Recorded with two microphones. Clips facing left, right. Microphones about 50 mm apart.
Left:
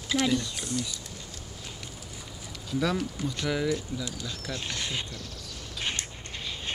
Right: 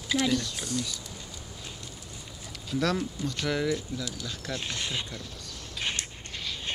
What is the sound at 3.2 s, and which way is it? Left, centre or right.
Speech, centre.